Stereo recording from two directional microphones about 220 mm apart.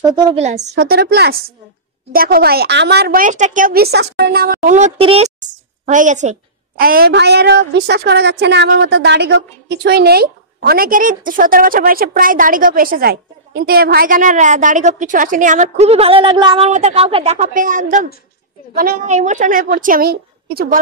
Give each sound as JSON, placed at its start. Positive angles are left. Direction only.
{"t": 0.1, "sound": "a woman's voice", "side_deg": -25}
{"t": 0.7, "sound": "a woman's voice", "side_deg": -45}